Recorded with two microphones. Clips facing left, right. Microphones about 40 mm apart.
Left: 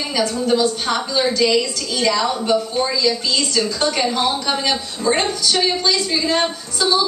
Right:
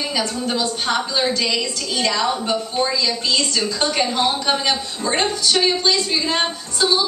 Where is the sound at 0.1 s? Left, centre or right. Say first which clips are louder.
Left 9 dB; centre.